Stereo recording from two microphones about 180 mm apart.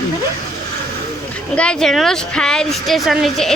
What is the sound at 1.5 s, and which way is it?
Speech, 5° left (ahead or behind).